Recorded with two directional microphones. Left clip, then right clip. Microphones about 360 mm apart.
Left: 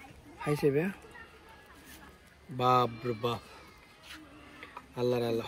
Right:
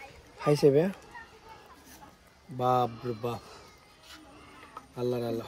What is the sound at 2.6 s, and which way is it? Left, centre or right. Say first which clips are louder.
Speech: even; centre.